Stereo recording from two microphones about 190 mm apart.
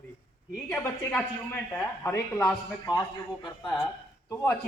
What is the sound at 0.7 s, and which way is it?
A man's voice, 10° left (ahead or behind).